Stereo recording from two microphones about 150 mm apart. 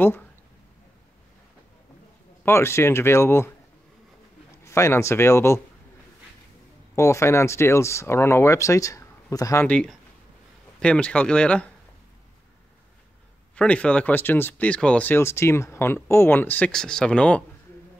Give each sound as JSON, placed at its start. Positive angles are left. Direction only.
{"t": 2.4, "sound": "speech", "side_deg": 15}
{"t": 4.6, "sound": "speech", "side_deg": 20}
{"t": 7.0, "sound": "speech", "side_deg": 20}
{"t": 9.7, "sound": "speech", "side_deg": 5}
{"t": 13.6, "sound": "speech", "side_deg": 5}